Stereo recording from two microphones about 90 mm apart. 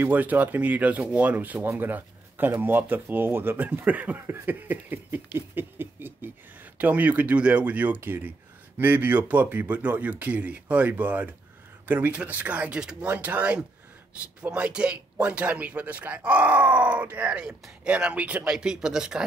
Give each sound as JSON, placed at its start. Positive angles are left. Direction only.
{"t": 0.0, "sound": "speech", "side_deg": -20}